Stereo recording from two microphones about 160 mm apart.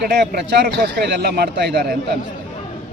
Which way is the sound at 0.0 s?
90° right.